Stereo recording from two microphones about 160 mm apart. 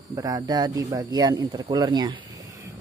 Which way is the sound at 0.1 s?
20° right (ahead or behind).